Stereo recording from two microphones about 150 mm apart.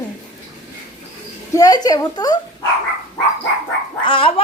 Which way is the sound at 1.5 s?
25° left (ahead or behind).